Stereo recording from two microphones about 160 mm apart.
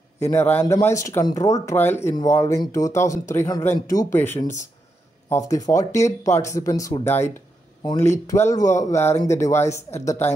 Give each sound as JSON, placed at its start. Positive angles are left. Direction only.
{"t": 0.2, "sound": "speech", "side_deg": 15}